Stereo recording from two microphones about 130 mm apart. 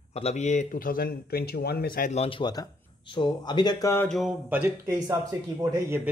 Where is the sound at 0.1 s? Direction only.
55° left (ahead or behind); by 1.0 s 90° left.